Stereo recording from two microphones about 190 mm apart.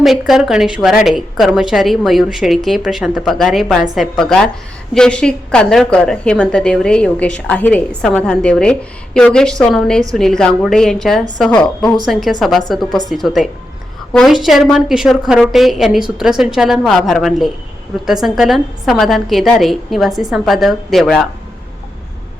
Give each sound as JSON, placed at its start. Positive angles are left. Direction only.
{"t": 0.0, "sound": "a woman's voice", "side_deg": 0}